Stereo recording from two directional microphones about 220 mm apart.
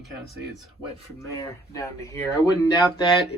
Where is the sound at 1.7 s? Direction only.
15° left (ahead or behind).